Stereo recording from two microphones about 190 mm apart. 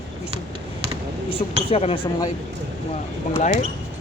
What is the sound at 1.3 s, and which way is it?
Speech, 30° left (ahead or behind).